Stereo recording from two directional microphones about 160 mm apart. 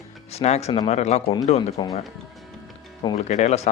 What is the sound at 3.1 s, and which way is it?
Speech, 45° left (ahead or behind).